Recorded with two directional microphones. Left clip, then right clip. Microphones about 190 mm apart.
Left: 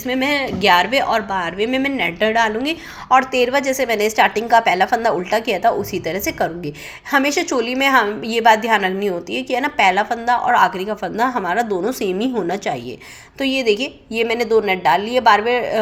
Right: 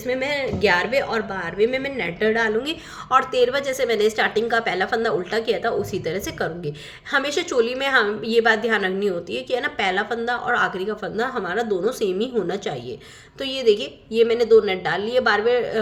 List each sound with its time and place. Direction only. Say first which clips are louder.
0.1 s a woman's voice: left 4 dB; 15° left (ahead or behind)
2.6 s a woman's voice: left 7 dB; 5° left (ahead or behind)